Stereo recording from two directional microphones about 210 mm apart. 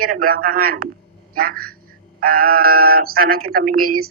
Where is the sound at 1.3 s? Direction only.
45° right (ahead or behind).